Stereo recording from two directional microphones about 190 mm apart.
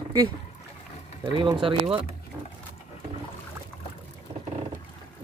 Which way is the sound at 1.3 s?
25° right (ahead or behind).